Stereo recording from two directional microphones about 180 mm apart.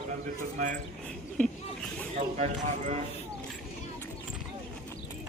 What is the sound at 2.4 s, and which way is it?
Speech, 40° right (ahead or behind).